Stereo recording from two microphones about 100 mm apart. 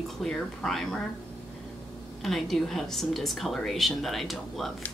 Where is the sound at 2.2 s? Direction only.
Centre (ahead or behind).